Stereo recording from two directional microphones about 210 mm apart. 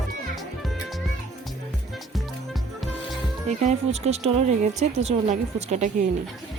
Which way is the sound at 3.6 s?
30° right (ahead or behind).